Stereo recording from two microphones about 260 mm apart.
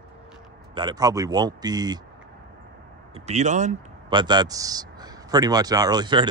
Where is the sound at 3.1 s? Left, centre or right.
Right.